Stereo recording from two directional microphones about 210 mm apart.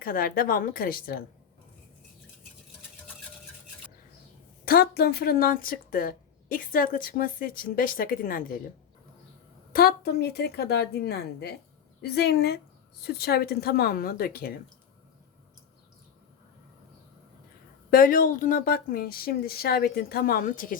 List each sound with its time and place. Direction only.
0.0 s speech: 45° left (ahead or behind)
4.6 s speech: 45° left (ahead or behind)
9.7 s speech: 50° left (ahead or behind)
17.9 s speech: 40° left (ahead or behind)